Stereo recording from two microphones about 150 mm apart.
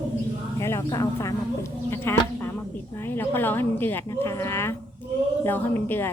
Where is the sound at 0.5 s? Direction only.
20° left (ahead or behind).